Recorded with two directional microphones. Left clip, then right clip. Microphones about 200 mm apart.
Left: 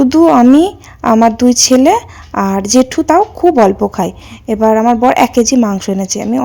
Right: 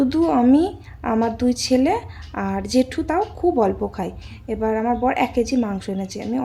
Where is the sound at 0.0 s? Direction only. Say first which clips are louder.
Left 11 dB; 35° left (ahead or behind).